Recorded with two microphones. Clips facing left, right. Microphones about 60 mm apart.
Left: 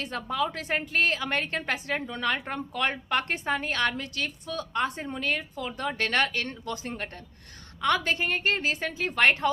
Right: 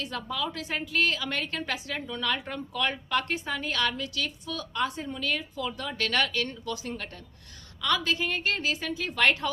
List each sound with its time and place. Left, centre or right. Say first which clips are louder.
0.0 s a woman's voice: left 3 dB; left